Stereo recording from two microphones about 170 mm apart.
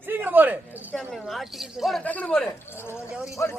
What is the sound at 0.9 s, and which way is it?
A man's voice, centre (ahead or behind).